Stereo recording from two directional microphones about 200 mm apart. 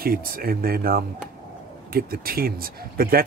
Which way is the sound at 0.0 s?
45° right (ahead or behind).